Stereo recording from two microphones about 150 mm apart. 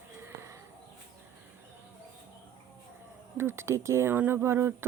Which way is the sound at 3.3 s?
15° right (ahead or behind).